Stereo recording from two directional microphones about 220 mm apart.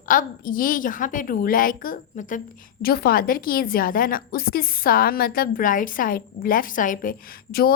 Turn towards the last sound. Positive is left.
turn(degrees=40)  # may be behind; listen again after turning